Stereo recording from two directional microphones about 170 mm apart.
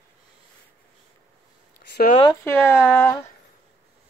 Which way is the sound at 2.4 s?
15° left (ahead or behind).